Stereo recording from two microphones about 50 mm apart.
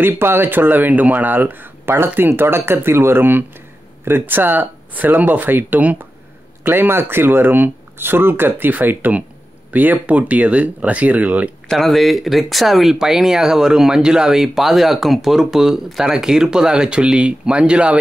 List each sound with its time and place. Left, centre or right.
0.0 s speech: right
6.7 s speech: right
11.7 s speech: centre; by 17.9 s right